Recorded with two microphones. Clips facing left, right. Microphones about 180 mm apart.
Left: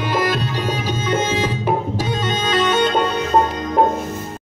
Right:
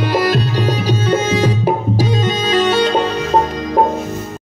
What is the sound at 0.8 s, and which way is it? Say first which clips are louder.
Tabla: right 3 dB; 35° right (ahead or behind).